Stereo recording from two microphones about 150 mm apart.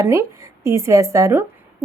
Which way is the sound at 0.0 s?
20° right (ahead or behind).